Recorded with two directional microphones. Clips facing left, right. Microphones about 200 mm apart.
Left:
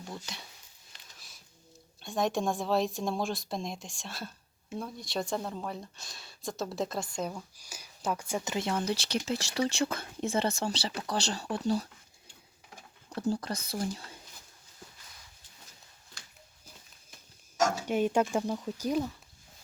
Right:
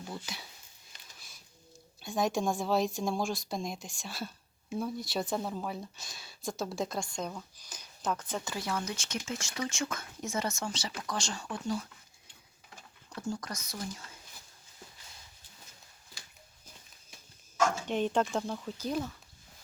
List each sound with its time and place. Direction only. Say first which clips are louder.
0.0 s speech: right 1 dB; 5° right (ahead or behind)
2.0 s speech: even; centre (ahead or behind); by 11.9 s 35° left (ahead or behind)
13.1 s speech: left 6 dB; 30° left (ahead or behind)
16.2 s a sound: even; 5° right (ahead or behind)
17.8 s speech: left 2 dB; 10° left (ahead or behind)